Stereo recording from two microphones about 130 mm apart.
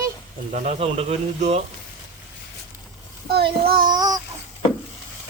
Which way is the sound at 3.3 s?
45° right (ahead or behind).